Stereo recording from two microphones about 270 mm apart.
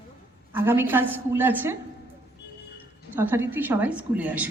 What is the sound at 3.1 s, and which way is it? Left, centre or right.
A woman's voice, centre.